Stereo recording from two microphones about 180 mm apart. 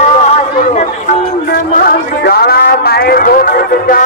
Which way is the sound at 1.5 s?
55° left (ahead or behind).